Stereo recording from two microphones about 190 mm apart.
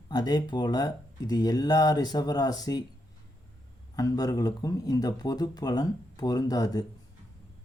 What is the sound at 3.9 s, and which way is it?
Speech, 20° left (ahead or behind).